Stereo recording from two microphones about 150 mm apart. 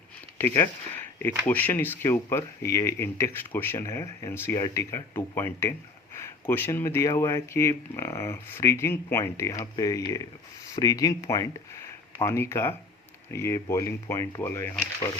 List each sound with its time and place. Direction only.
0.3 s speech: 15° left (ahead or behind)